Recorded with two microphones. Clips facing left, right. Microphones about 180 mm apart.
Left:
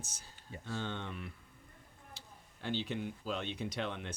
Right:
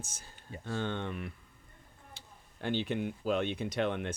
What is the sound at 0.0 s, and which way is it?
Speech, 55° right (ahead or behind).